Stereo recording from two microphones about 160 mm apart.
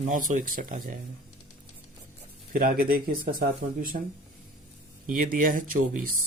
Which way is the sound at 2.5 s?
65° right (ahead or behind).